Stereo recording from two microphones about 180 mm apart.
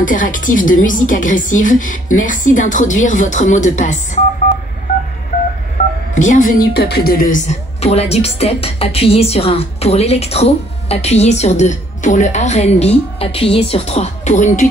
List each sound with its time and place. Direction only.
0.0 s a woman's voice: 45° left (ahead or behind)
6.1 s a woman's voice: 45° left (ahead or behind)